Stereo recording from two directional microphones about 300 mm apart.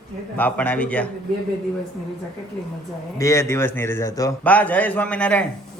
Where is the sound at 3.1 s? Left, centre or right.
Centre.